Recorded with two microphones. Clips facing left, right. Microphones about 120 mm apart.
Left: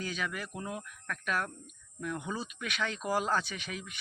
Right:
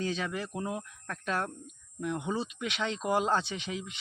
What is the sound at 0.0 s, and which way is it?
Speech, 30° right (ahead or behind).